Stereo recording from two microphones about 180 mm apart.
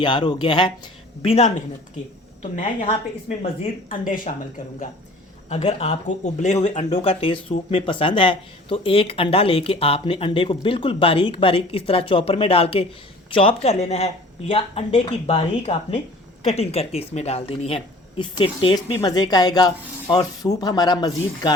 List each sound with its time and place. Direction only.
0.0 s speech: 25° left (ahead or behind)
3.8 s speech: 50° left (ahead or behind)
5.5 s speech: 35° left (ahead or behind)
18.9 s speech: 20° left (ahead or behind)